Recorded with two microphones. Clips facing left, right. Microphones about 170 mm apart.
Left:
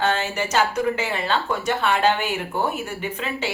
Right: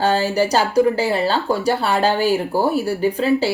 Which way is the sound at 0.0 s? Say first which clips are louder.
Right 6 dB; 35° right (ahead or behind).